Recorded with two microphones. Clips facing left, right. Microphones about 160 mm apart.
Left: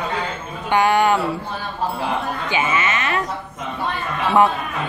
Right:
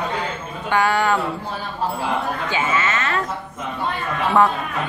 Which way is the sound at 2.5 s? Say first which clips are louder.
Left 2 dB; 15° left (ahead or behind).